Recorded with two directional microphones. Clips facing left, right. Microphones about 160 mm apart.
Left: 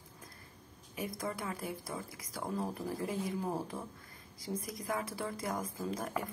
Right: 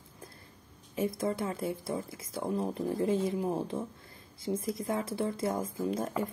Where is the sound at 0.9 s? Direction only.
25° right (ahead or behind).